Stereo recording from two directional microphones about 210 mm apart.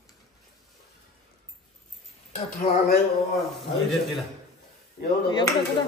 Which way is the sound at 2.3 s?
40° left (ahead or behind).